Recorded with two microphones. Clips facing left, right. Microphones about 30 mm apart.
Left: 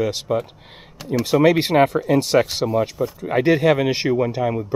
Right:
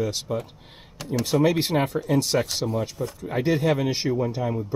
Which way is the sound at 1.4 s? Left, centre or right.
Left.